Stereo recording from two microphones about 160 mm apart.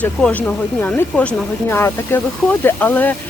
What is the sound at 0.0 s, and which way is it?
Speech, 10° left (ahead or behind).